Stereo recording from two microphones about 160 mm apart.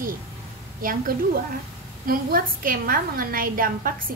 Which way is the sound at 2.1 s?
65° right (ahead or behind).